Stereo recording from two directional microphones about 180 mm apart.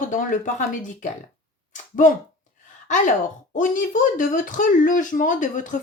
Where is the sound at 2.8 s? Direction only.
45° left (ahead or behind).